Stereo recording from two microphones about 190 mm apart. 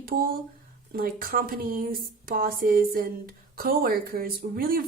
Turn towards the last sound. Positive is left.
turn(degrees=-50)  # may be behind; listen again after turning